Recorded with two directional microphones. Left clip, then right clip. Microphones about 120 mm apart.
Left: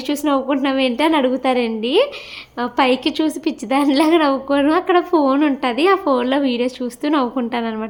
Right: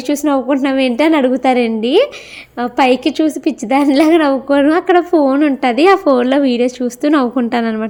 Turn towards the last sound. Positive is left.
turn(degrees=-45)  # may be behind; listen again after turning